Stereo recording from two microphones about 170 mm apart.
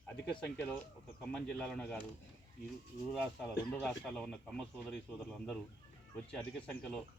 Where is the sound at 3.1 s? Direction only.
Centre (ahead or behind).